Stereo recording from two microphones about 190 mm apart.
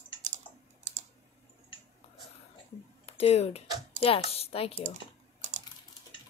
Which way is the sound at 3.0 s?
30° left (ahead or behind).